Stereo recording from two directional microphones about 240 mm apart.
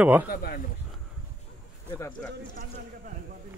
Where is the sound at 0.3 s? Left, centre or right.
Left.